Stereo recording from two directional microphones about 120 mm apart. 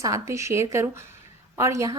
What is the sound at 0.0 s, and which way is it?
A woman's voice, 25° right (ahead or behind).